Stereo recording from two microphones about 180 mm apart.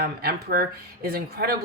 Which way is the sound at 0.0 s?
60° right (ahead or behind).